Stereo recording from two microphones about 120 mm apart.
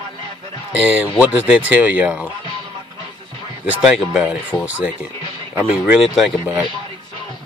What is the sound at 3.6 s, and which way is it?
Speech, 10° right (ahead or behind).